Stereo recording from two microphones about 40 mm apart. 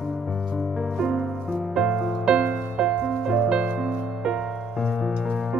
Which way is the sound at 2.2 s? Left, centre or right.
Right.